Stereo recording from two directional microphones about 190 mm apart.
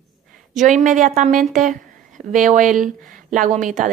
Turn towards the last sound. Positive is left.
turn(degrees=-45)  # may be behind; listen again after turning